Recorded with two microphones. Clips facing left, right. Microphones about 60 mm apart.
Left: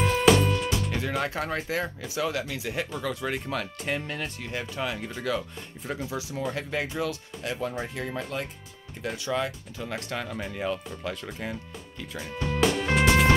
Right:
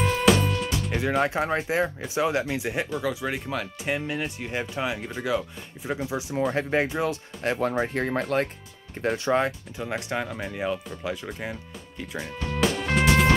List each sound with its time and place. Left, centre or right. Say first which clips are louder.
0.0 s music: even; centre
0.9 s speech: right 5 dB; centre
2.9 s speech: right 2 dB; centre
6.1 s speech: right 7 dB; right
7.4 s speech: right 6 dB; right
9.0 s speech: right 6 dB; right
9.8 s speech: right 3 dB; right
10.3 s speech: right 2 dB; centre
12.3 s music: left 1 dB; centre